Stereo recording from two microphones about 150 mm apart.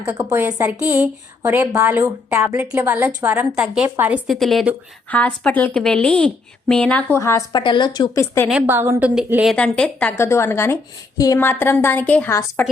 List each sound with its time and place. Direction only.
0.0 s a woman's voice: 10° right (ahead or behind)
4.3 s a woman's voice: centre (ahead or behind); by 7.6 s 20° left (ahead or behind)
7.6 s speech: 30° left (ahead or behind)
8.4 s a woman's voice: 10° right (ahead or behind); by 12.6 s 15° left (ahead or behind)